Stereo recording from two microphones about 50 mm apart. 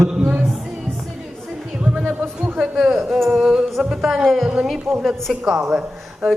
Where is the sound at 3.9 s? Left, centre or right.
Centre.